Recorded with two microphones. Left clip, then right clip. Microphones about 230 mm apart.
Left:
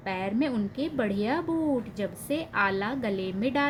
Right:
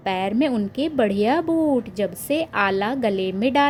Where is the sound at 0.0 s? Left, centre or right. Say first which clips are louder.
Right 8 dB; right.